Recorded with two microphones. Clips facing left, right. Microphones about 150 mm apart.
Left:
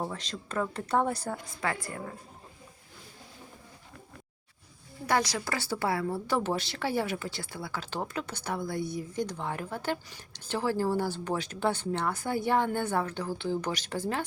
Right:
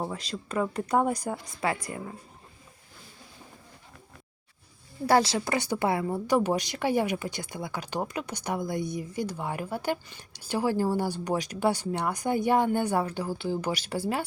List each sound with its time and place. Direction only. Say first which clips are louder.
0.0 s a woman's voice: right 2 dB; 10° right (ahead or behind)
5.0 s speech: right 5 dB; 30° right (ahead or behind); by 14.3 s 10° right (ahead or behind)